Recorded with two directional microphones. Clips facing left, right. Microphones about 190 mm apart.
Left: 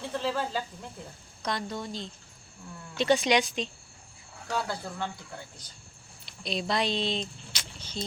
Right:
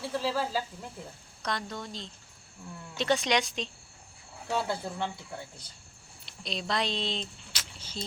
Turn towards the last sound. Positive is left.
turn(degrees=-5)  # may be behind; listen again after turning